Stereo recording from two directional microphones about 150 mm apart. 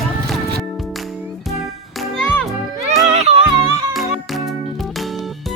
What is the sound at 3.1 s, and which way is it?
Music, 45° right (ahead or behind).